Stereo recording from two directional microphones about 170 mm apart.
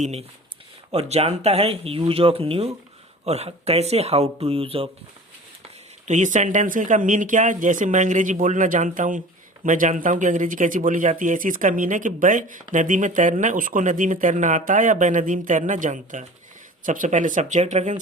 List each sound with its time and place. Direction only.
0.0 s speech: 35° right (ahead or behind)
6.1 s speech: 45° right (ahead or behind)